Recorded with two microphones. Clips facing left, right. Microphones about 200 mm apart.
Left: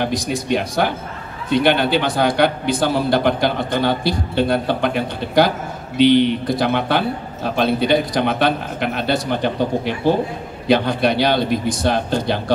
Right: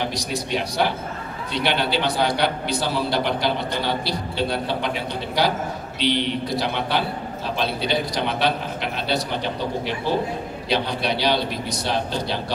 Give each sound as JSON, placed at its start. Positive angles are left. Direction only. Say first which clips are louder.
{"t": 0.0, "sound": "a man's voice", "louder": "left 5 dB", "side_deg": 50}